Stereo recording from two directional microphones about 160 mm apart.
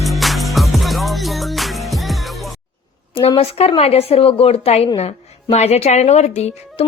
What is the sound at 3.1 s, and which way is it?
A woman's voice, 35° left (ahead or behind).